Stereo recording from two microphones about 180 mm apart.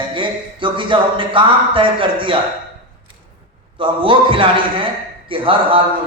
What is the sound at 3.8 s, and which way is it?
Speech, 30° right (ahead or behind).